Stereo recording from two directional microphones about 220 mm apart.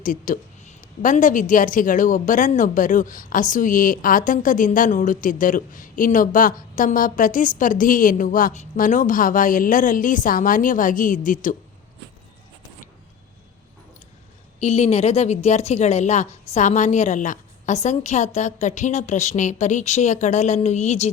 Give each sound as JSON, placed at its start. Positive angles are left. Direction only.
{"t": 0.0, "sound": "a woman's voice", "side_deg": 35}
{"t": 14.6, "sound": "a woman's voice", "side_deg": 30}